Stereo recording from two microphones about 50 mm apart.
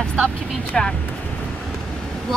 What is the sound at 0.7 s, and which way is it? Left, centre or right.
Speech, centre.